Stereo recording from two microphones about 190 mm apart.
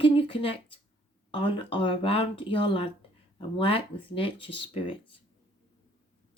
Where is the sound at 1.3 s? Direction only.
30° left (ahead or behind).